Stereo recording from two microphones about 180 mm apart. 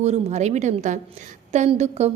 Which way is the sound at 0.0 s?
40° right (ahead or behind).